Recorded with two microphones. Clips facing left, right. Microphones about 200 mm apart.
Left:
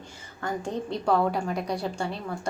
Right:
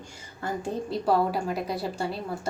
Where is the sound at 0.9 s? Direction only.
5° right (ahead or behind).